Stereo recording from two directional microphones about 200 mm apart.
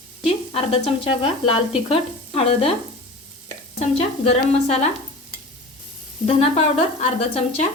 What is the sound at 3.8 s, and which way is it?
Speech, 35° left (ahead or behind).